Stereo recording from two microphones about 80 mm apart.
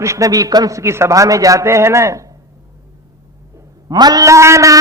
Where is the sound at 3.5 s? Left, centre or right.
Right.